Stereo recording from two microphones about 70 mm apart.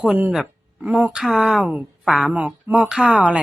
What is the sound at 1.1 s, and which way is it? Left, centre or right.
Speech, centre.